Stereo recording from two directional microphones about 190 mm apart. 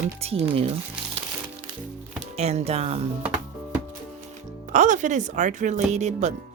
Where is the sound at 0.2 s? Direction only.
35° right (ahead or behind).